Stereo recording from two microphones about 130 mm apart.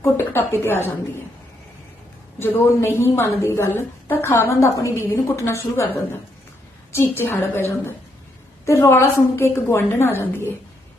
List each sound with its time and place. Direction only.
0.0 s a woman's voice: 15° left (ahead or behind)
2.4 s a woman's voice: 20° left (ahead or behind)